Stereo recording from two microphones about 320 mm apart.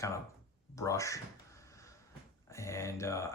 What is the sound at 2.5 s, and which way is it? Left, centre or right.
Speech, centre.